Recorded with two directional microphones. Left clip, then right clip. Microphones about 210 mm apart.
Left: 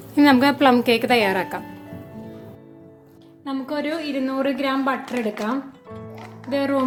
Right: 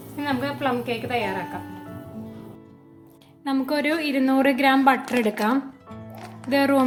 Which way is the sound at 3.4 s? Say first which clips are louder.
Right 3 dB; 30° right (ahead or behind).